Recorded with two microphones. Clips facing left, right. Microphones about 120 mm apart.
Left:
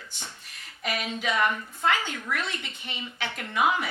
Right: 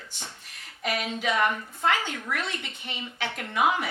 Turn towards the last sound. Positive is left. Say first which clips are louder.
# even
turn(degrees=-50)  # may be behind; listen again after turning